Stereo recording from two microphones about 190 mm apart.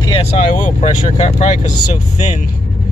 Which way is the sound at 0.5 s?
40° left (ahead or behind).